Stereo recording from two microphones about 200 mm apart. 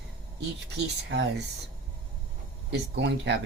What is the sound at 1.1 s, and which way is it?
Speech, 60° right (ahead or behind).